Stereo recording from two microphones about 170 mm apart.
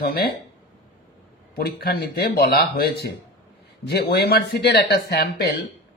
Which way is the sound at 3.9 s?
70° left (ahead or behind).